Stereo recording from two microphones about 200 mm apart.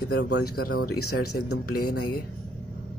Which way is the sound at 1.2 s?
90° left.